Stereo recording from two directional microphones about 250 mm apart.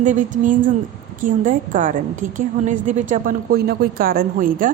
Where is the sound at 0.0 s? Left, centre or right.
Right.